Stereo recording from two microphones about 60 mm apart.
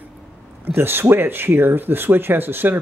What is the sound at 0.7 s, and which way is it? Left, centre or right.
Speech, right.